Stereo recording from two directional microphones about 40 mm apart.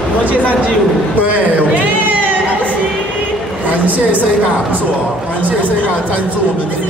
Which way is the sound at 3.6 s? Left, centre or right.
Right.